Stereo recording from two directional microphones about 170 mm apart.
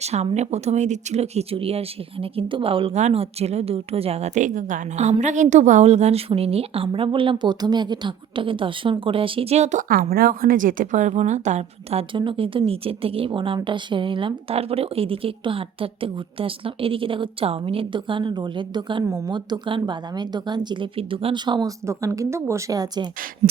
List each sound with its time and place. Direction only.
0.0 s speech: 40° right (ahead or behind)
9.9 s a woman's voice: 60° right (ahead or behind); by 23.0 s 20° right (ahead or behind)
23.4 s a sound: 45° right (ahead or behind)